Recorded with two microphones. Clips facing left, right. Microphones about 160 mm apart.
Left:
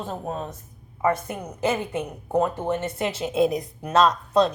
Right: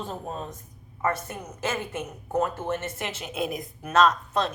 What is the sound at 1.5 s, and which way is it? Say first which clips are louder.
Speech: left 6 dB; 15° left (ahead or behind).